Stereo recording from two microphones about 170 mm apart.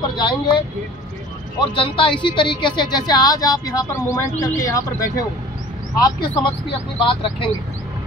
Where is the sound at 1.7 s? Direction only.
30° left (ahead or behind).